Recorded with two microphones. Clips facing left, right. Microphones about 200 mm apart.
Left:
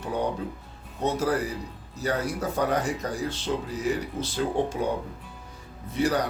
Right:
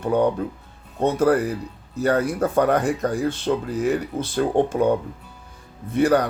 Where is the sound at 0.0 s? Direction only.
55° right (ahead or behind).